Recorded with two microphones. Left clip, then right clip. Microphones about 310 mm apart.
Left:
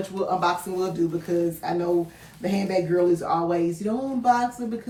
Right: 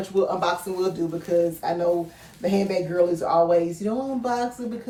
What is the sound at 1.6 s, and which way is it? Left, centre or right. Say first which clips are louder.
Speech: right 1 dB; centre.